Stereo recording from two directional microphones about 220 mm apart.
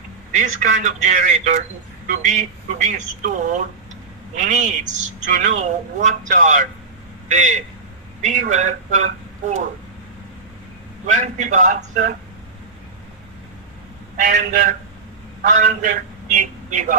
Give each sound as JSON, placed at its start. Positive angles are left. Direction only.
{"t": 0.3, "sound": "speech", "side_deg": -35}
{"t": 11.0, "sound": "speech", "side_deg": -35}
{"t": 14.2, "sound": "a man's voice", "side_deg": -35}